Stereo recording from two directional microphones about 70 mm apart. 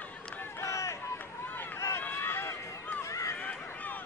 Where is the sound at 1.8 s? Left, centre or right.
Left.